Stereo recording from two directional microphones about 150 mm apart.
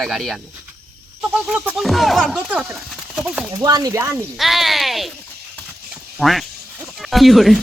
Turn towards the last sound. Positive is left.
turn(degrees=0)  # may be behind; listen again after turning